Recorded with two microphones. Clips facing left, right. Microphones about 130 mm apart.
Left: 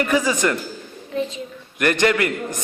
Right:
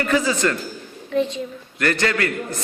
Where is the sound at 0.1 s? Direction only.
15° left (ahead or behind).